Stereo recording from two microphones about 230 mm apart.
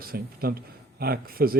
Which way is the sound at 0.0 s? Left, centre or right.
Right.